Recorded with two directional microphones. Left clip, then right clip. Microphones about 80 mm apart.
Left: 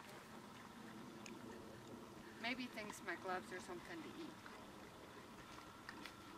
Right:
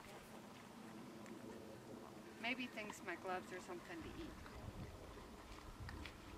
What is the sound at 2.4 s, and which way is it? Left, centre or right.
Speech, centre.